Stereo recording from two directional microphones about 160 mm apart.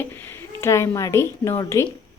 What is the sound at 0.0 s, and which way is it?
A woman's voice, 15° left (ahead or behind).